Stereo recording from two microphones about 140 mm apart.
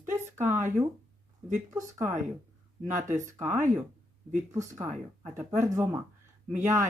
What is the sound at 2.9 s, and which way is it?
Speech, 65° right (ahead or behind).